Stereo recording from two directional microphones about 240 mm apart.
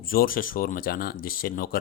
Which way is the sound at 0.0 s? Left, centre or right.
Left.